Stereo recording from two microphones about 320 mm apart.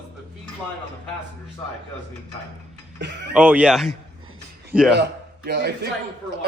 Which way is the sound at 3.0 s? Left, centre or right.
Right.